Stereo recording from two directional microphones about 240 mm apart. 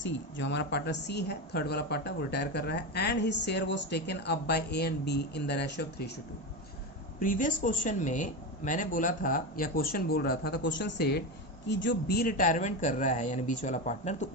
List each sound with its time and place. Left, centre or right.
0.0 s a woman's voice: left
7.2 s speech: left